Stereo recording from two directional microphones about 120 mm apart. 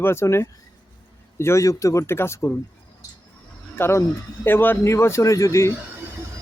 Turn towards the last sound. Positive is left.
turn(degrees=25)  # may be behind; listen again after turning